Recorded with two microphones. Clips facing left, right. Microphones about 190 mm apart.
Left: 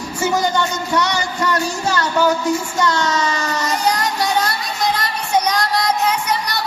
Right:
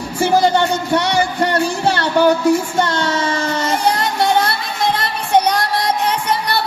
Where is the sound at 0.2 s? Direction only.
30° right (ahead or behind).